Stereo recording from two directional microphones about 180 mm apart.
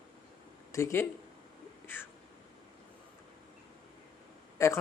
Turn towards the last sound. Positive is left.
turn(degrees=15)  # may be behind; listen again after turning